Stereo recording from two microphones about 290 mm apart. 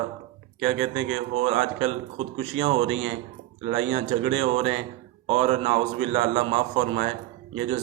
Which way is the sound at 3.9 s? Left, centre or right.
Right.